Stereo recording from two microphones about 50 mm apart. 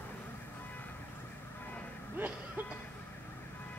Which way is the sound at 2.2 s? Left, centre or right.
Right.